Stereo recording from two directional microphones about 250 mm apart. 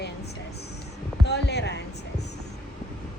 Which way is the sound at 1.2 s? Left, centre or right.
Left.